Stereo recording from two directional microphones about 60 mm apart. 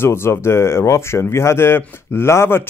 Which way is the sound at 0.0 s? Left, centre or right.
Left.